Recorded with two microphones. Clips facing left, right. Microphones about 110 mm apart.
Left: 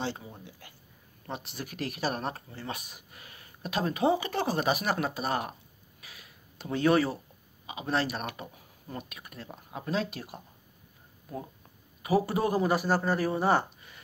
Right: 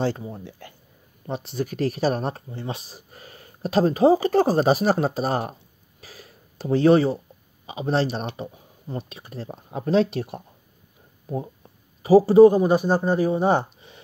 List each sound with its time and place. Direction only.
0.0 s speech: 40° right (ahead or behind)
12.0 s a man's voice: 30° right (ahead or behind)